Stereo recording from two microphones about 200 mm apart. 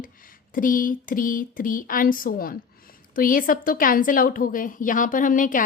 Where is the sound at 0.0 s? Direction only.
45° left (ahead or behind).